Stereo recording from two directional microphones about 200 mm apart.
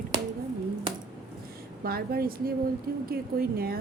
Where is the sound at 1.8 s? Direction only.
50° right (ahead or behind).